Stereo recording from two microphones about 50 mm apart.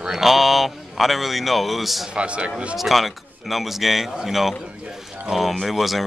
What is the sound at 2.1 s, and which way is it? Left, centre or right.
Speech, right.